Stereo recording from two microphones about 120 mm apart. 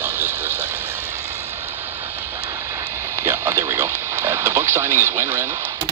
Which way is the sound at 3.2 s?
20° right (ahead or behind).